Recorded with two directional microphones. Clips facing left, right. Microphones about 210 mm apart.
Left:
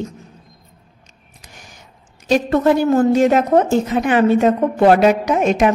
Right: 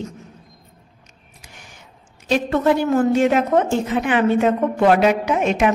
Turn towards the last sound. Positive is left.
turn(degrees=40)  # may be behind; listen again after turning